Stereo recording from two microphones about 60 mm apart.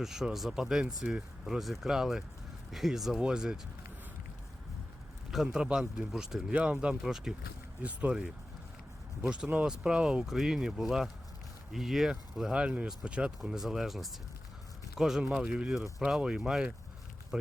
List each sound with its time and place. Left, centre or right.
0.0 s speech: centre
5.3 s speech: centre
6.5 s speech: right
7.0 s speech: centre
7.8 s speech: right
9.2 s speech: centre
12.6 s speech: right
13.4 s speech: centre
15.7 s speech: centre